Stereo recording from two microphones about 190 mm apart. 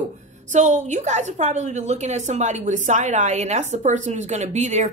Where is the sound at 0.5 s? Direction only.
40° right (ahead or behind).